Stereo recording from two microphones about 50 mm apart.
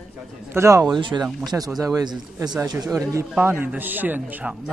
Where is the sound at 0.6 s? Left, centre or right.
Right.